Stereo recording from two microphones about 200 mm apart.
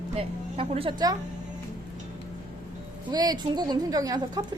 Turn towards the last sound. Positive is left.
turn(degrees=-20)  # may be behind; listen again after turning